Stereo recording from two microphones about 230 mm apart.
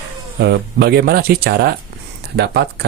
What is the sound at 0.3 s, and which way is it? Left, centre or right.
Speech, right.